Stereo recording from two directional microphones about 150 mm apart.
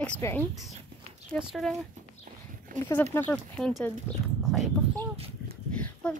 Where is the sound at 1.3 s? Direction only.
5° left (ahead or behind).